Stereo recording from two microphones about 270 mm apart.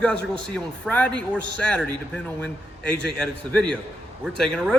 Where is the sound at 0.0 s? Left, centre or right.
Centre.